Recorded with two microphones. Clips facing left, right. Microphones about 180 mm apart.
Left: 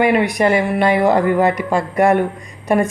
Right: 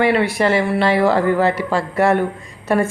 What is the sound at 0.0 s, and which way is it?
Speech, 15° left (ahead or behind).